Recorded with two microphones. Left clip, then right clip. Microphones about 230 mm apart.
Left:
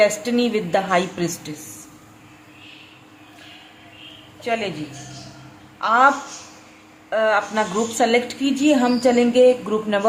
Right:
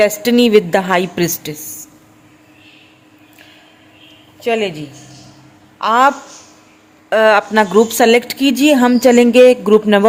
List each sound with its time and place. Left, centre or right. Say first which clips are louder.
0.0 s a woman's voice: right 6 dB; right
4.4 s speech: right 7 dB; right
5.8 s a woman's voice: right 4 dB; right
7.1 s a woman's voice: right 8 dB; right